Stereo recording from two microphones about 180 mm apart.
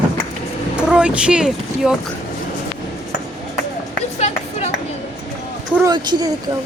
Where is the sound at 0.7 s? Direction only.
5° right (ahead or behind).